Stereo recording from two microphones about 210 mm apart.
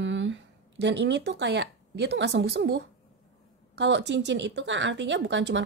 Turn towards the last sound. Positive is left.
turn(degrees=-60)  # may be behind; listen again after turning